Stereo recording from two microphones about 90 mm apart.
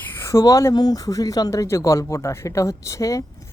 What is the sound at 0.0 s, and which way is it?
Speech, 25° left (ahead or behind).